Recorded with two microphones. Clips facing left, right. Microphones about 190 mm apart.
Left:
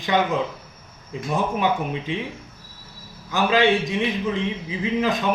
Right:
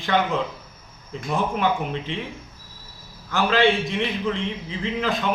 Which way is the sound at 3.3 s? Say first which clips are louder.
Left 1 dB; 15° left (ahead or behind).